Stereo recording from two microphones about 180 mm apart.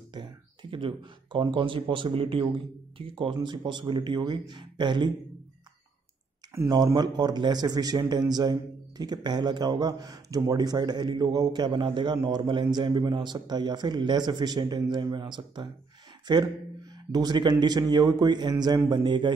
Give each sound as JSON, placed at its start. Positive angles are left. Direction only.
{"t": 0.1, "sound": "a man's voice", "side_deg": -25}
{"t": 6.5, "sound": "a man's voice", "side_deg": -20}